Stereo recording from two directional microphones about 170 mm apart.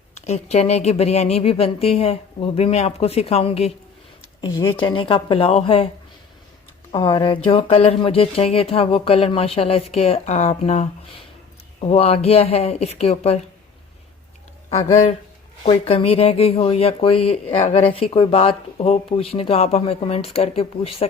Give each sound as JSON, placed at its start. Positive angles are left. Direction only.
{"t": 0.3, "sound": "speech", "side_deg": 40}
{"t": 6.9, "sound": "speech", "side_deg": 25}
{"t": 14.8, "sound": "speech", "side_deg": 35}